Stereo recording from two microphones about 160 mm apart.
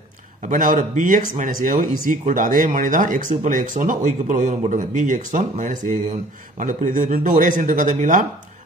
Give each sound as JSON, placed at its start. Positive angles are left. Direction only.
{"t": 0.4, "sound": "speech", "side_deg": -55}